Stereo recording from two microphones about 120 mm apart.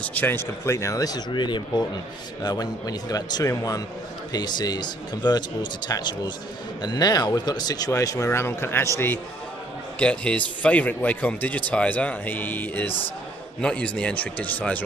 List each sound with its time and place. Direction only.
0.0 s speech: 15° left (ahead or behind)